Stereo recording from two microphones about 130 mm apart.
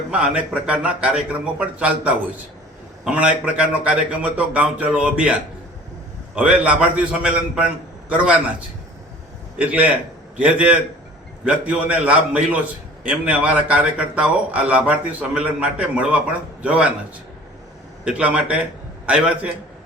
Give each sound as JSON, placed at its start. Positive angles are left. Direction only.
{"t": 0.1, "sound": "a man's voice", "side_deg": -10}
{"t": 18.0, "sound": "speech", "side_deg": -10}